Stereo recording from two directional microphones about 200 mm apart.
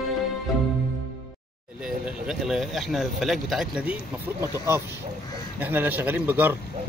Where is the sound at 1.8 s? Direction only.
5° right (ahead or behind).